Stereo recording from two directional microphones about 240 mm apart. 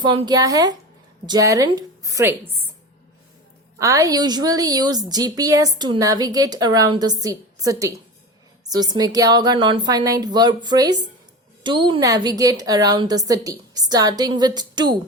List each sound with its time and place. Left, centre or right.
0.0 s a woman's voice: centre
3.8 s a woman's voice: centre